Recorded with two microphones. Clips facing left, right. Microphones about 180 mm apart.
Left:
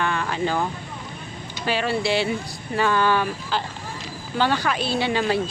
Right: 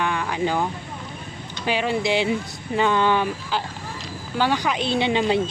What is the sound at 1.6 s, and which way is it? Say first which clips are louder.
A woman's voice: right 1 dB; 15° right (ahead or behind).